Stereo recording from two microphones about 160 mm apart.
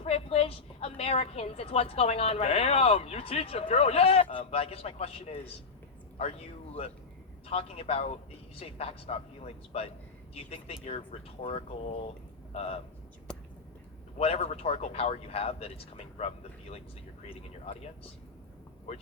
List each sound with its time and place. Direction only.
0.0 s a woman's voice: 40° left (ahead or behind)
7.5 s a woman's voice: 40° left (ahead or behind)
13.3 s a sound: 5° left (ahead or behind)
14.2 s a woman's voice: 40° left (ahead or behind)